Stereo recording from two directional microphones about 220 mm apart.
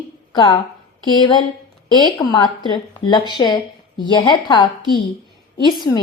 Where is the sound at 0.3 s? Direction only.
15° left (ahead or behind).